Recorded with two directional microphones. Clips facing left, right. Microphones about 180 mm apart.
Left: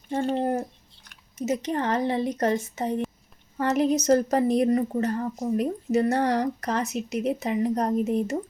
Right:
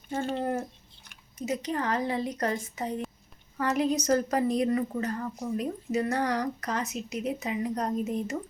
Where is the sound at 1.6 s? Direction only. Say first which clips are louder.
Left 3 dB; 25° left (ahead or behind).